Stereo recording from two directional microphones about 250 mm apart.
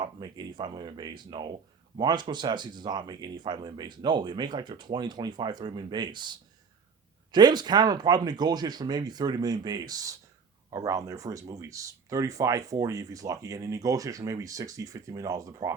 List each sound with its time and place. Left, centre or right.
0.0 s speech: centre